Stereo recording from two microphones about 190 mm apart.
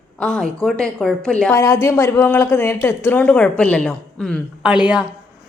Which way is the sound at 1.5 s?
15° left (ahead or behind).